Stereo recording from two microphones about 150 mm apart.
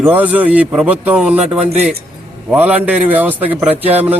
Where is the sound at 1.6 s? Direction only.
45° right (ahead or behind).